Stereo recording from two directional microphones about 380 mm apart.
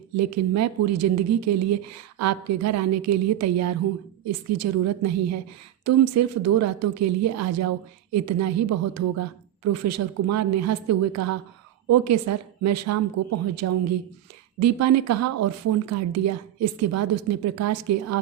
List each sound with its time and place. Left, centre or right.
0.2 s speech: right